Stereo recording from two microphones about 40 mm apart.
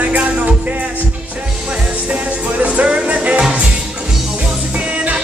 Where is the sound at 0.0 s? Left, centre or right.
Right.